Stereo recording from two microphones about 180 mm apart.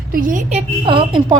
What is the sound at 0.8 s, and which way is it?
Speech, 25° right (ahead or behind).